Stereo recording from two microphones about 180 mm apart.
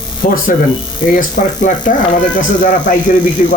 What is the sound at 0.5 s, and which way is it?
Speech, 45° left (ahead or behind).